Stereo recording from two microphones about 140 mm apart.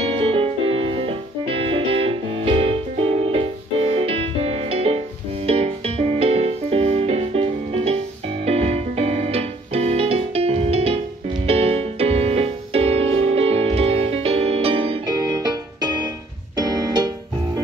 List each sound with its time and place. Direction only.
0.0 s music: 40° right (ahead or behind)
15.0 s music: 25° right (ahead or behind)
16.5 s keyboard: 25° right (ahead or behind)